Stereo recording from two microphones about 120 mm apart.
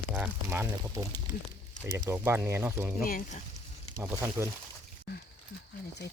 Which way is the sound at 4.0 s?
15° right (ahead or behind).